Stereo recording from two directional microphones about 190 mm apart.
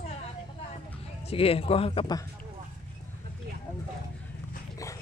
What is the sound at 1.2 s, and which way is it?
Speech, 30° left (ahead or behind).